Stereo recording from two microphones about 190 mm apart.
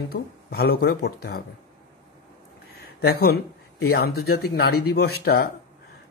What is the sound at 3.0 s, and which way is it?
Mantra, 55° left (ahead or behind).